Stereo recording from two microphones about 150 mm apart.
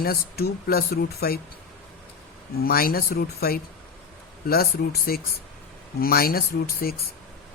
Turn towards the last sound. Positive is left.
turn(degrees=75)  # may be behind; listen again after turning